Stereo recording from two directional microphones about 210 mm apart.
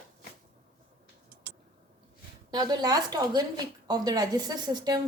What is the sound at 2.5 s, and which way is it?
A woman's voice, 20° right (ahead or behind).